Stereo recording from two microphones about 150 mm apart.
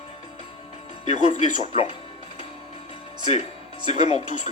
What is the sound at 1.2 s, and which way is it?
Speech, 50° left (ahead or behind).